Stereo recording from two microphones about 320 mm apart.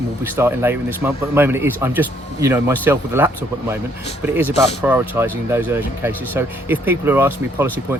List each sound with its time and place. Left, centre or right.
0.3 s speech: centre